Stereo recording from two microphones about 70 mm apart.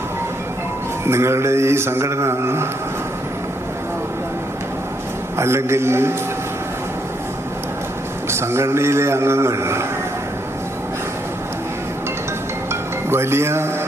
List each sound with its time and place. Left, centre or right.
1.0 s music: right
5.4 s music: right
8.3 s music: right
13.1 s music: right